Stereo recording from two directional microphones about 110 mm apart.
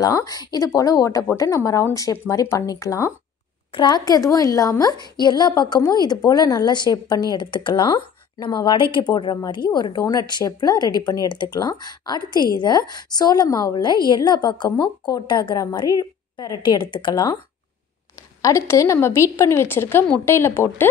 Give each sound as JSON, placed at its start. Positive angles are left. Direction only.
{"t": 0.0, "sound": "a woman's voice", "side_deg": 35}
{"t": 3.7, "sound": "a woman's voice", "side_deg": 40}
{"t": 18.4, "sound": "a woman's voice", "side_deg": 25}